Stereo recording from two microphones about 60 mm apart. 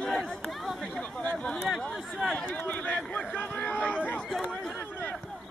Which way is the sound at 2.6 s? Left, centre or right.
Left.